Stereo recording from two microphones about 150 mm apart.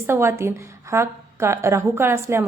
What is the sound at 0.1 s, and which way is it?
A woman's voice, 15° right (ahead or behind).